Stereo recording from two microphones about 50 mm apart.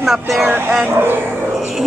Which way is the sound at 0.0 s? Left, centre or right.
Centre.